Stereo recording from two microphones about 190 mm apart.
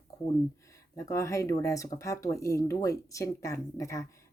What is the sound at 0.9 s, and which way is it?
Speech, 15° left (ahead or behind).